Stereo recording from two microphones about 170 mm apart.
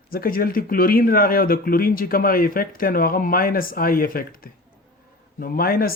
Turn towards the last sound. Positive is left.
turn(degrees=60)  # may be behind; listen again after turning